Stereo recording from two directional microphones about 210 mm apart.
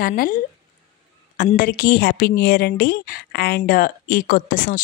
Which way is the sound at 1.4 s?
40° left (ahead or behind).